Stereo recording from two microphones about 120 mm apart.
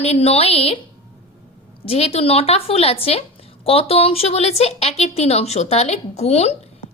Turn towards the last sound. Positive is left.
turn(degrees=60)  # may be behind; listen again after turning